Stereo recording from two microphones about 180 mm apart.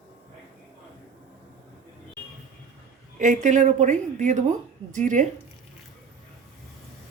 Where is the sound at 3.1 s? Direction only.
45° right (ahead or behind).